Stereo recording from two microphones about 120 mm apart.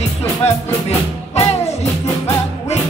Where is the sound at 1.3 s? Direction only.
60° left (ahead or behind).